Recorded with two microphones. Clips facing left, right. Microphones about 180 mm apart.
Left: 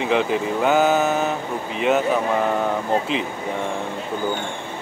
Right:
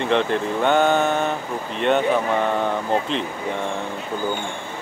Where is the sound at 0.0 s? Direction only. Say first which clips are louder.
Even; 5° left (ahead or behind).